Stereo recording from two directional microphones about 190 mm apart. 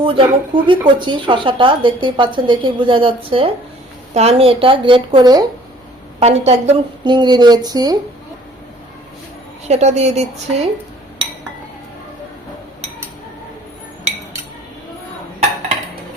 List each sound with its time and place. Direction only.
0.0 s a woman's voice: 30° right (ahead or behind)
6.1 s a woman's voice: 35° right (ahead or behind)
9.6 s a woman's voice: 35° right (ahead or behind)